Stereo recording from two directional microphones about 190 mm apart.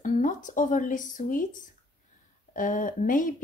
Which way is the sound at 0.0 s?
45° left (ahead or behind).